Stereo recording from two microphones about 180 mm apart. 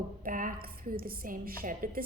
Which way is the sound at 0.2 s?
50° right (ahead or behind).